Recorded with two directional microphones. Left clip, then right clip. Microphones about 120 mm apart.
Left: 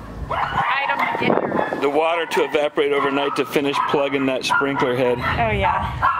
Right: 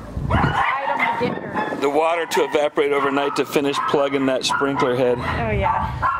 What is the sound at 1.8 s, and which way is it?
Speech, 5° right (ahead or behind).